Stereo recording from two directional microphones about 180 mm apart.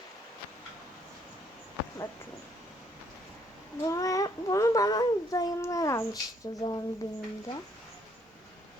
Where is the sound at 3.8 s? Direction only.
20° left (ahead or behind).